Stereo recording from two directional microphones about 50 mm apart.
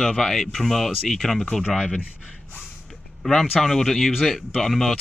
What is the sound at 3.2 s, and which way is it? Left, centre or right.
Speech, centre.